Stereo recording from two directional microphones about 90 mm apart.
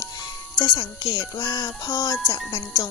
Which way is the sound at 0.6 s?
60° left (ahead or behind).